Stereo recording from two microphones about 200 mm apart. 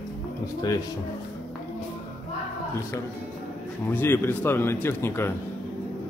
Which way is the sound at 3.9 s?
10° left (ahead or behind).